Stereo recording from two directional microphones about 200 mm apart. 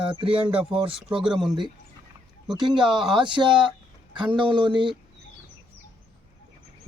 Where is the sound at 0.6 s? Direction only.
25° right (ahead or behind).